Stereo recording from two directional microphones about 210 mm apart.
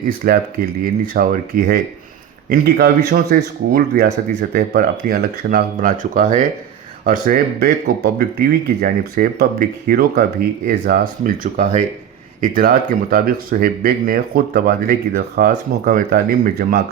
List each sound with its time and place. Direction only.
0.2 s speech: 45° right (ahead or behind)